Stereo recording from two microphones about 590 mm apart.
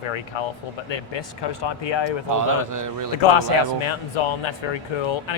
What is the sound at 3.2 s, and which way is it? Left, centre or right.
Speech, left.